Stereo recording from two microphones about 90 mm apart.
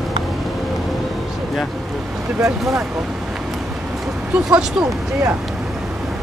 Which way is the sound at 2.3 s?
35° right (ahead or behind).